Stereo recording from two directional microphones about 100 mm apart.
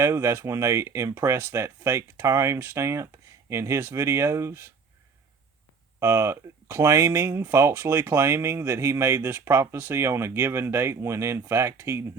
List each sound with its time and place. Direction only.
0.0 s speech: 30° right (ahead or behind)
6.0 s speech: 30° right (ahead or behind)